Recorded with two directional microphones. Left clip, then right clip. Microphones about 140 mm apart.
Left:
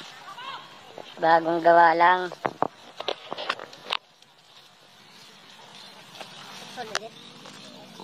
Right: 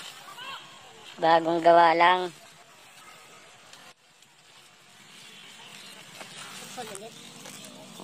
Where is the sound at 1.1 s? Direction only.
20° right (ahead or behind).